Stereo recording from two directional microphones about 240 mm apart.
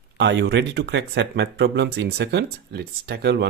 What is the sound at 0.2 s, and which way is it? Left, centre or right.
Speech, right.